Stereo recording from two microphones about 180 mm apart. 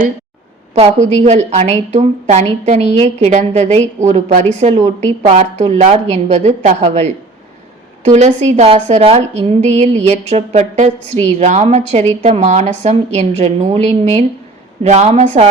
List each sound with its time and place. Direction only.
0.7 s a woman's voice: 40° right (ahead or behind)